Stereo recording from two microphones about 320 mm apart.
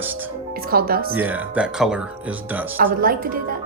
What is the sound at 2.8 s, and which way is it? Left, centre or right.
Speech, right.